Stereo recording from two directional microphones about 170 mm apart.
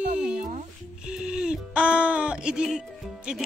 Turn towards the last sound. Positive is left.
turn(degrees=0)  # may be behind; listen again after turning